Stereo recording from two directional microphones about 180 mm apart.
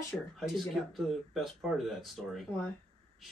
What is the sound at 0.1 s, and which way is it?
Speech, 5° left (ahead or behind).